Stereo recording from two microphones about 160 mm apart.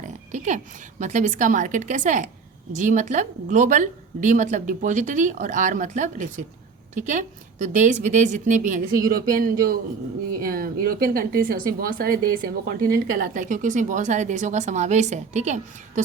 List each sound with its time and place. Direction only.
0.3 s speech: 50° right (ahead or behind)